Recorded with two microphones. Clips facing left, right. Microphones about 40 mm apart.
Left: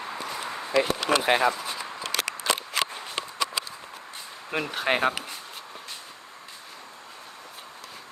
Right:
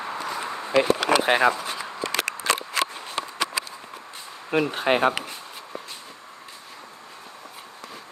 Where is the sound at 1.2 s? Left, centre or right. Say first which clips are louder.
Right 3 dB; right.